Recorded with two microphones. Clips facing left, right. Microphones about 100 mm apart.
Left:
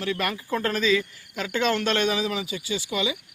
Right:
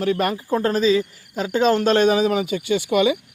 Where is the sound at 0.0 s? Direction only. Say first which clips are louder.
Right 7 dB; 40° right (ahead or behind).